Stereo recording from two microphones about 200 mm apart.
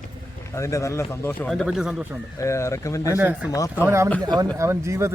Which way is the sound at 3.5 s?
15° left (ahead or behind).